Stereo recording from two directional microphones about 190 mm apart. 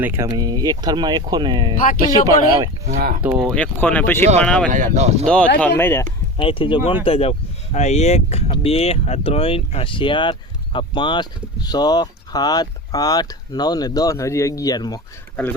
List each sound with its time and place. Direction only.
0.0 s speech: 15° right (ahead or behind)
2.8 s speech: 45° right (ahead or behind)
3.2 s speech: 5° right (ahead or behind)
3.5 s speech: 5° left (ahead or behind)
4.7 s speech: 40° right (ahead or behind)
5.2 s speech: 5° left (ahead or behind)
6.3 s speech: 30° left (ahead or behind)